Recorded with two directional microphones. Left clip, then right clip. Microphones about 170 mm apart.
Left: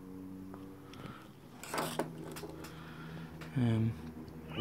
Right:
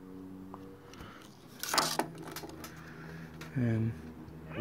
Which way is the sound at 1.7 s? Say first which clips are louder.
Right 6 dB; 30° right (ahead or behind).